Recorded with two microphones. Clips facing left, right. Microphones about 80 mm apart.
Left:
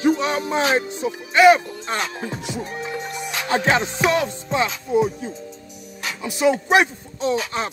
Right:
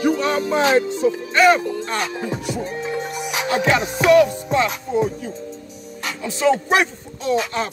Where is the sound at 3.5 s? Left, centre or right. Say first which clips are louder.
Even; left.